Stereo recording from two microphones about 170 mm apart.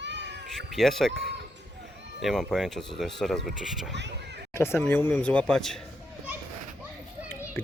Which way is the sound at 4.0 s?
90° right.